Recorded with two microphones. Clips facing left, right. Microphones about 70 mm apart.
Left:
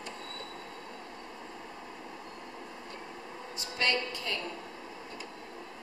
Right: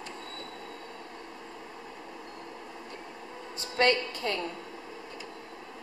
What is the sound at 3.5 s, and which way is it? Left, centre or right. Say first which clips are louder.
Speech: right 6 dB; right.